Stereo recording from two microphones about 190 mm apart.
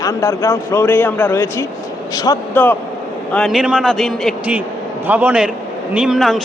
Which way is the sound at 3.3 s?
Centre (ahead or behind).